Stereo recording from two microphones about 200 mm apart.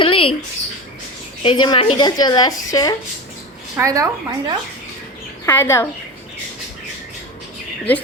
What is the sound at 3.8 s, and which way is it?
Speech, 15° right (ahead or behind).